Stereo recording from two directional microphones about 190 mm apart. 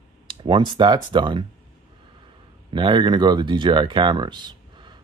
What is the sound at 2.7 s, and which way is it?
Speech, 25° right (ahead or behind).